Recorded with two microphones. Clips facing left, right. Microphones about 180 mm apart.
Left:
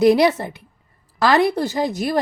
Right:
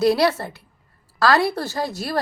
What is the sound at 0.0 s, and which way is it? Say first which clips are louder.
A woman's voice: left 4 dB; 15° left (ahead or behind).